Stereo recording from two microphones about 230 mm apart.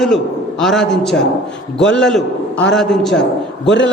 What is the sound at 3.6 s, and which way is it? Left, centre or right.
Speech, left.